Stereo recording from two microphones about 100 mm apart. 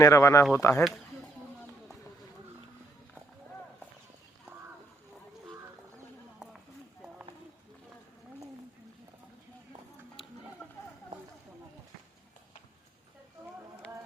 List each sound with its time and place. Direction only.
0.0 s speech: 30° left (ahead or behind)